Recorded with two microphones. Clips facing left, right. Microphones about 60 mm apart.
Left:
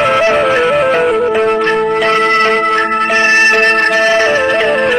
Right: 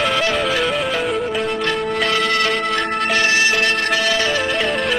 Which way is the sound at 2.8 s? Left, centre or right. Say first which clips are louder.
Left 7 dB; left.